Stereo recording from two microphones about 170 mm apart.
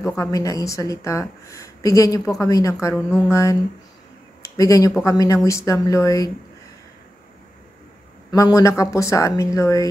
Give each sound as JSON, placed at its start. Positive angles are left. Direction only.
{"t": 0.2, "sound": "a woman's voice", "side_deg": 20}
{"t": 8.3, "sound": "a woman's voice", "side_deg": 20}